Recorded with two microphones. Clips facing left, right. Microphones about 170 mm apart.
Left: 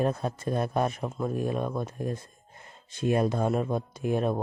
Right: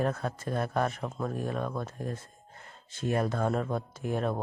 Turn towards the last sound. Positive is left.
turn(degrees=20)  # may be behind; listen again after turning